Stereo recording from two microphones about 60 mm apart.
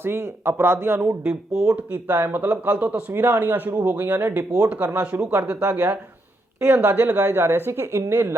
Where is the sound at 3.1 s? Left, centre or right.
Right.